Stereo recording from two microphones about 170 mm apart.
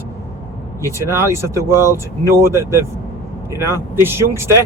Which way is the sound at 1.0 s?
15° right (ahead or behind).